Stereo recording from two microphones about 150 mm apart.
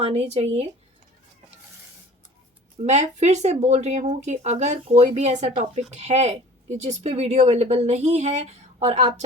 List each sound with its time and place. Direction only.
0.0 s speech: 45° right (ahead or behind)
2.7 s speech: 50° right (ahead or behind)